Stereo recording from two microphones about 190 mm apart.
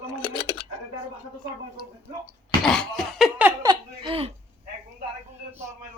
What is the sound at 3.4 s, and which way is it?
Laughter, 20° right (ahead or behind).